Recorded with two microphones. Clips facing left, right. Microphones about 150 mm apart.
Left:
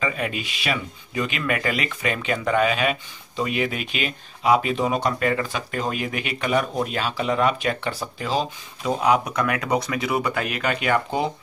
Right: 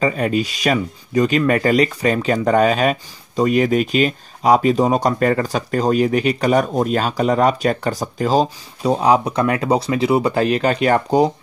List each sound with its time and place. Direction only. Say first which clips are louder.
0.0 s speech: right 8 dB; 35° right (ahead or behind)